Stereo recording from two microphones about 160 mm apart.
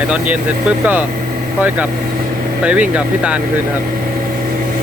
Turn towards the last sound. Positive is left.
turn(degrees=-5)  # may be behind; listen again after turning